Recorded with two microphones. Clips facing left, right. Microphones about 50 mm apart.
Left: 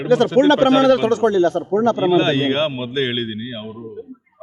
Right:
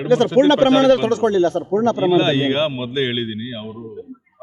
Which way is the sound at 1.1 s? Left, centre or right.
Left.